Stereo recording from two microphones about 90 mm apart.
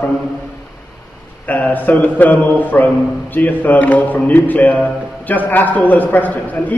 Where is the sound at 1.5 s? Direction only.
20° left (ahead or behind).